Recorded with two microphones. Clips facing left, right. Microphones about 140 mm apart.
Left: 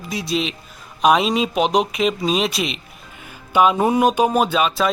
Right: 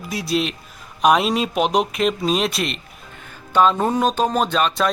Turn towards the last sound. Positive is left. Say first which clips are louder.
# left 1 dB
turn(degrees=5)  # may be behind; listen again after turning